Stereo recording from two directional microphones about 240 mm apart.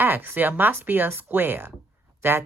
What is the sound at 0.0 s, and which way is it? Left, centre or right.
Speech, centre.